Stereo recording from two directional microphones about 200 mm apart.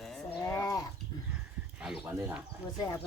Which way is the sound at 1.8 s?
5° right (ahead or behind).